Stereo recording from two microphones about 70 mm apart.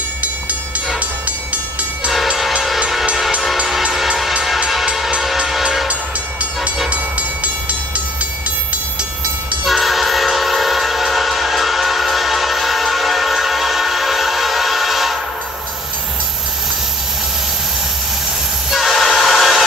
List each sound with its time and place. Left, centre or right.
0.2 s train: right
2.0 s train: centre
6.9 s train: right
9.7 s train: centre
18.7 s train: centre